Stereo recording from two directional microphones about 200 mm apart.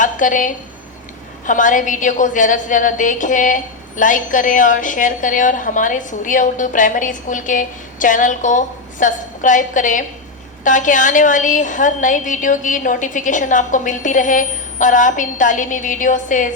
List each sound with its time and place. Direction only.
0.0 s a woman's voice: 40° left (ahead or behind)